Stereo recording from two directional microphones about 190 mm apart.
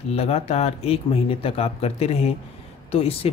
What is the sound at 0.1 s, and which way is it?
Speech, 30° left (ahead or behind).